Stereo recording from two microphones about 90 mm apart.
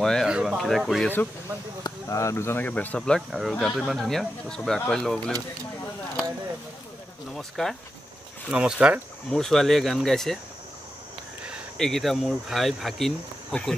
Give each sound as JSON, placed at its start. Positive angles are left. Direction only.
{"t": 0.0, "sound": "speech", "side_deg": 5}
{"t": 0.3, "sound": "speech", "side_deg": -10}
{"t": 1.8, "sound": "speech", "side_deg": 35}
{"t": 2.6, "sound": "speech", "side_deg": 15}
{"t": 3.2, "sound": "speech", "side_deg": 0}
{"t": 7.3, "sound": "speech", "side_deg": 5}
{"t": 8.5, "sound": "speech", "side_deg": -10}
{"t": 9.3, "sound": "speech", "side_deg": 5}
{"t": 11.8, "sound": "speech", "side_deg": 5}